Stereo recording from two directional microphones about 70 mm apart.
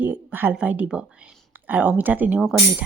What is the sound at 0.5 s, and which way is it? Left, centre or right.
Speech, right.